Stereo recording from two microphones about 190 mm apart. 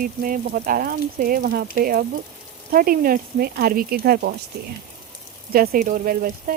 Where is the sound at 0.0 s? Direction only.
45° right (ahead or behind).